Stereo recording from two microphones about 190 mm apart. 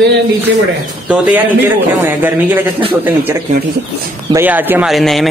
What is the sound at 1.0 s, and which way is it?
Speech, 5° right (ahead or behind).